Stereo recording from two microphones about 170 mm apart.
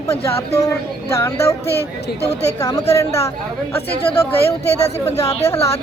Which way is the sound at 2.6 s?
20° left (ahead or behind).